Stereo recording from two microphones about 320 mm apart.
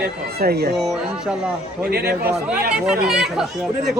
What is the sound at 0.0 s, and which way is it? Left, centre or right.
Speech, right.